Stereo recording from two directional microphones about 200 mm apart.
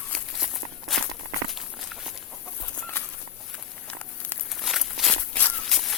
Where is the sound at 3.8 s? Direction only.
5° left (ahead or behind).